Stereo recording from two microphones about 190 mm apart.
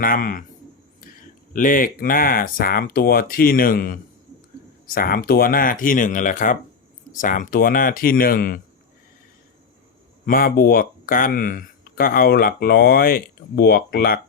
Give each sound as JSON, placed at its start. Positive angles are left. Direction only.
{"t": 0.0, "sound": "speech", "side_deg": 45}
{"t": 1.5, "sound": "speech", "side_deg": 45}
{"t": 10.2, "sound": "speech", "side_deg": 50}